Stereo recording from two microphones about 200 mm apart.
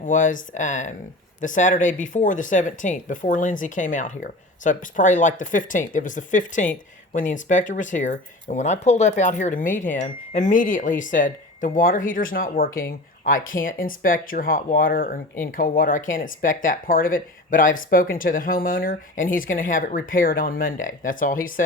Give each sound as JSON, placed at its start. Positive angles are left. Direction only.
{"t": 0.0, "sound": "speech", "side_deg": 40}